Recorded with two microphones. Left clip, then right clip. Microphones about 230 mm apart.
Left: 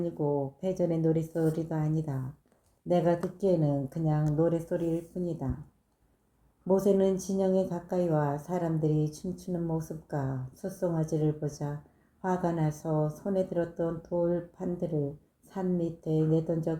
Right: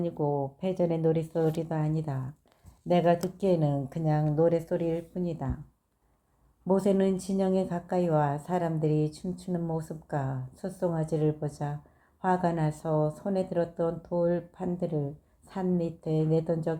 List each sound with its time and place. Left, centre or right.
0.0 s speech: right
2.8 s speech: right
6.7 s speech: right